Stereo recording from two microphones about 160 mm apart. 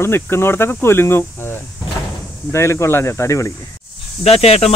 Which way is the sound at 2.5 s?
15° left (ahead or behind).